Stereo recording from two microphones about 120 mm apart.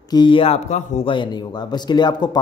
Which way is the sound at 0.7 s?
75° left (ahead or behind).